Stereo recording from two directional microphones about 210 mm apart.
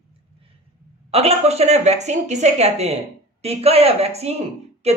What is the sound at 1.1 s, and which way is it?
Speech, 30° right (ahead or behind).